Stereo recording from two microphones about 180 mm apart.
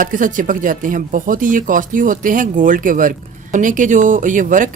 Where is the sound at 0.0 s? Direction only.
45° right (ahead or behind).